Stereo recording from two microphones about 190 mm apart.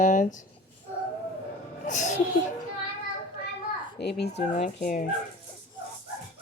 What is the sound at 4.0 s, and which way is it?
Speech, 60° left (ahead or behind).